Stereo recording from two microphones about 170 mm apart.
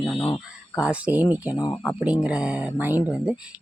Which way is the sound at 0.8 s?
5° right (ahead or behind).